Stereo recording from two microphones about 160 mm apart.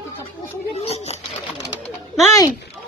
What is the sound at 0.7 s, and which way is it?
Speech, 40° left (ahead or behind).